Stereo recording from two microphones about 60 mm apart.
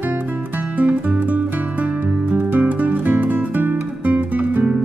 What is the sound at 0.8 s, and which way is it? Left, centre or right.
Music, right.